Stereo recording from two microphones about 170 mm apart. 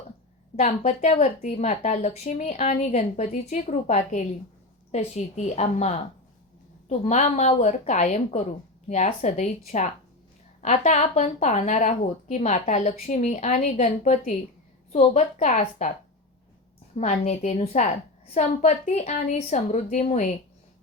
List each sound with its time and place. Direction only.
0.5 s a woman's voice: 40° left (ahead or behind)
16.9 s a woman's voice: 40° left (ahead or behind)